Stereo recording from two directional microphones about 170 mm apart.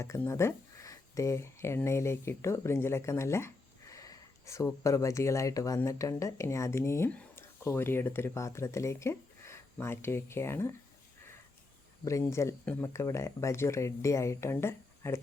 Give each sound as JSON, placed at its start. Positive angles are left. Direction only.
{"t": 0.0, "sound": "speech", "side_deg": 15}
{"t": 12.0, "sound": "speech", "side_deg": 15}